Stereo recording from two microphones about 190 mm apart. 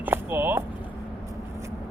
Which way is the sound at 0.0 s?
10° right (ahead or behind).